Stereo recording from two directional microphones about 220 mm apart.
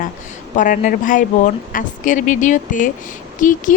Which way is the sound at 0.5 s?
35° left (ahead or behind).